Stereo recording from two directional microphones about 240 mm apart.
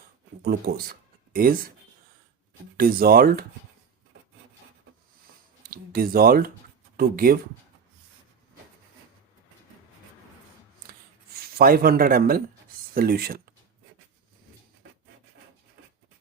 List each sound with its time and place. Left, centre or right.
0.4 s speech: right
2.7 s speech: right
5.7 s speech: right
11.5 s speech: right